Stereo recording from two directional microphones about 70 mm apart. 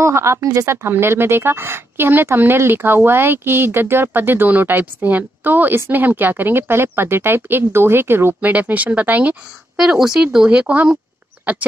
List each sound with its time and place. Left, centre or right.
0.0 s a woman's voice: right
9.8 s speech: centre